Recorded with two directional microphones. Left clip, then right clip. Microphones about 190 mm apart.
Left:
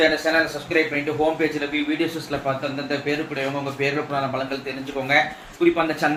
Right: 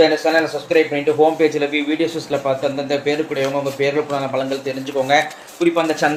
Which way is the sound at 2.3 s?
40° right (ahead or behind).